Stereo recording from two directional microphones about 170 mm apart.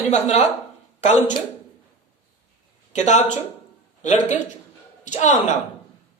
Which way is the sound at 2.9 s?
45° left (ahead or behind).